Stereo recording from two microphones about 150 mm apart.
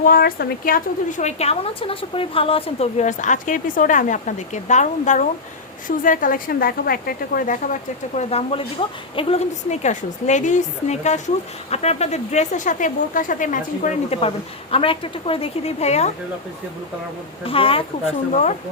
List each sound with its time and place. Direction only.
0.0 s speech: 80° left
1.2 s a woman's voice: 45° left (ahead or behind)
6.0 s a woman's voice: 65° left (ahead or behind)
14.2 s a woman's voice: 40° left (ahead or behind)
17.4 s a woman's voice: 35° left (ahead or behind)